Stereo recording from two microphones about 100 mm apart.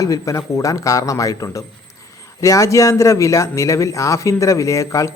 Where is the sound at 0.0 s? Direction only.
30° left (ahead or behind).